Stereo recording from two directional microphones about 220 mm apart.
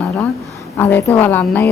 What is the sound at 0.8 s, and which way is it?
Speech, 10° left (ahead or behind).